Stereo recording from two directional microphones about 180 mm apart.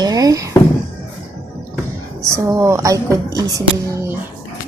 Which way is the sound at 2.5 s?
15° right (ahead or behind).